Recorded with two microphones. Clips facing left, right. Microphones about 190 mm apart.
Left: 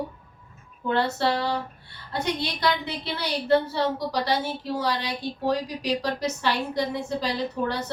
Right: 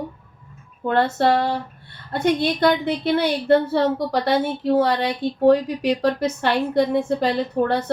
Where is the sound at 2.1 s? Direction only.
55° right (ahead or behind).